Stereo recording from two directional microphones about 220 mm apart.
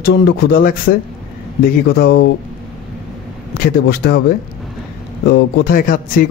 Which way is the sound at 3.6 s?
45° left (ahead or behind).